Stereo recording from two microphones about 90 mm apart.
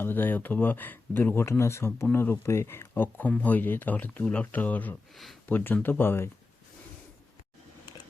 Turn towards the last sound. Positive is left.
turn(degrees=25)  # may be behind; listen again after turning